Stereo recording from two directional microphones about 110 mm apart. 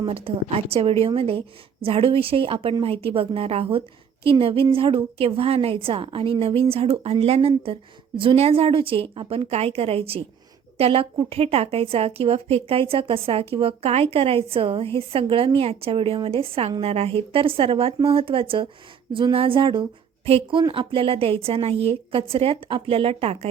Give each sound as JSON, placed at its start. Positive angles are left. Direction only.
{"t": 0.1, "sound": "a woman's voice", "side_deg": -60}